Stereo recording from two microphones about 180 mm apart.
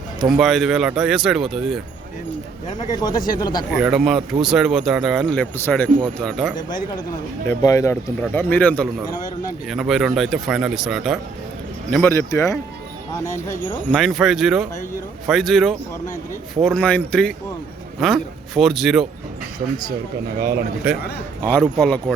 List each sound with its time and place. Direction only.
0.3 s speech: centre (ahead or behind)
2.9 s speech: 20° left (ahead or behind)
3.8 s speech: centre (ahead or behind)
7.4 s speech: 20° left (ahead or behind); by 11.2 s centre (ahead or behind)
11.9 s speech: 10° left (ahead or behind)
13.9 s speech: centre (ahead or behind)
20.9 s a man's voice: 10° right (ahead or behind)
21.4 s speech: 5° left (ahead or behind)